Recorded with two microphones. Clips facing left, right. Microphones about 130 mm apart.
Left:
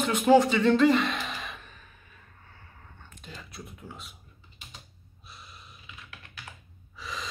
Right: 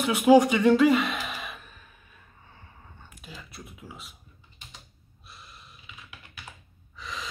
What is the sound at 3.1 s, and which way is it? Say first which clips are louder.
Computer keyboard: left 1 dB; 5° right (ahead or behind).